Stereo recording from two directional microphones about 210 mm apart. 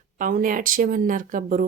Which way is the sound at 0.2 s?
40° right (ahead or behind).